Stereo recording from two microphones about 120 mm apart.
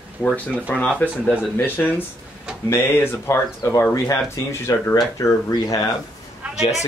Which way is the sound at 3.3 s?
25° left (ahead or behind).